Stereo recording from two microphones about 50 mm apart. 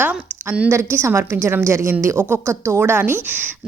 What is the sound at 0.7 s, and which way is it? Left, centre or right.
A woman's voice, right.